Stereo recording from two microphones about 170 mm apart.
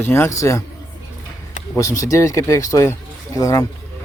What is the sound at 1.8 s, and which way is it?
Speech, 20° left (ahead or behind).